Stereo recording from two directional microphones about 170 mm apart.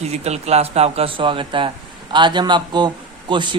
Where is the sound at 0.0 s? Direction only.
40° right (ahead or behind).